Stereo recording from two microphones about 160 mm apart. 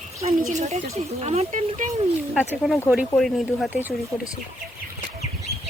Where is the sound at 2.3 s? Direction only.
5° right (ahead or behind).